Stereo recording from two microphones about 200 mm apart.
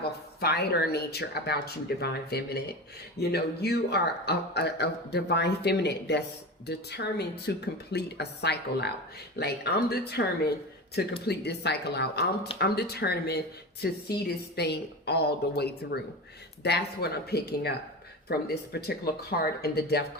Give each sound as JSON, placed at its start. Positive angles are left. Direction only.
{"t": 0.0, "sound": "a man's voice", "side_deg": 55}